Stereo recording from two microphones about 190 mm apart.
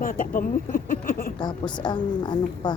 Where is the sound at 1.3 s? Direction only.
25° left (ahead or behind).